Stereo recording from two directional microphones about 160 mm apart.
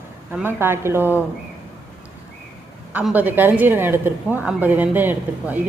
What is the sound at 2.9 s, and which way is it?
A woman's voice, 10° right (ahead or behind).